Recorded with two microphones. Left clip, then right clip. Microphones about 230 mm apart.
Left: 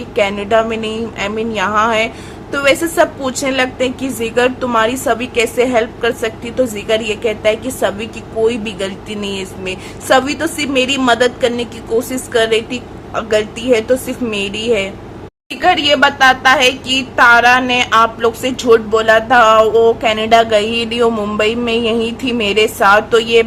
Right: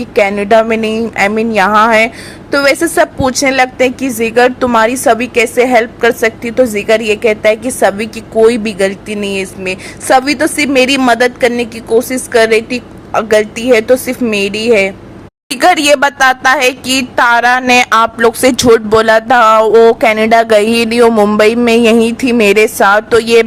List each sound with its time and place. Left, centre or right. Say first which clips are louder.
0.2 s a woman's voice: right 5 dB; right
15.5 s a woman's voice: right 4 dB; right